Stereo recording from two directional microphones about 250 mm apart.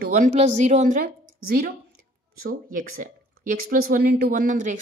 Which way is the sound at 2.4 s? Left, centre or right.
Right.